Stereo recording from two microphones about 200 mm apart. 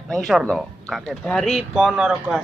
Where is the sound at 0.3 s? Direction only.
Centre (ahead or behind).